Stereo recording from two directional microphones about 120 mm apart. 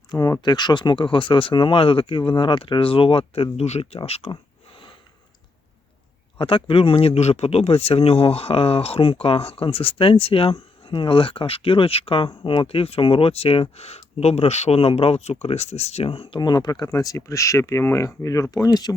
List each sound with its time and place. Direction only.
0.1 s speech: 30° left (ahead or behind); by 4.3 s 55° left (ahead or behind)
6.4 s speech: 45° left (ahead or behind)
16.4 s speech: 35° left (ahead or behind)